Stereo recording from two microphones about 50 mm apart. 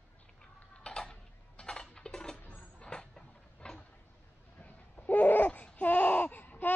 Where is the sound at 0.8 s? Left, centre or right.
Centre.